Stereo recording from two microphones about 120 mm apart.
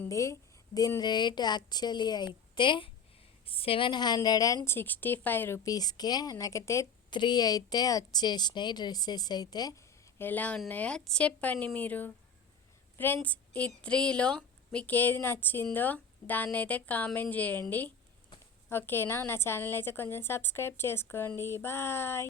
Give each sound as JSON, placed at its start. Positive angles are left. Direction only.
{"t": 0.1, "sound": "a woman's voice", "side_deg": 25}
{"t": 5.6, "sound": "a woman's voice", "side_deg": 35}
{"t": 7.1, "sound": "a woman's voice", "side_deg": 40}
{"t": 10.2, "sound": "a woman's voice", "side_deg": 15}